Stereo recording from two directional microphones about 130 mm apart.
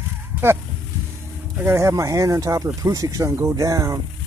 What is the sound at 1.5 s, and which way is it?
Speech, 20° right (ahead or behind).